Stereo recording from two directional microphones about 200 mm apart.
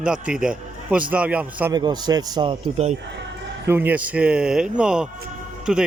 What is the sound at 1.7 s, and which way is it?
A man's voice, 20° right (ahead or behind).